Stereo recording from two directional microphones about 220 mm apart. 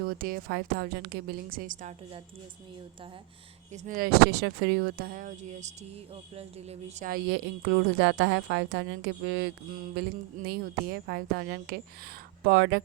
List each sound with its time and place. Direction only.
0.0 s a woman's voice: 40° right (ahead or behind)
3.7 s a woman's voice: 40° right (ahead or behind)
7.1 s a woman's voice: 50° right (ahead or behind)
10.0 s a woman's voice: 45° right (ahead or behind)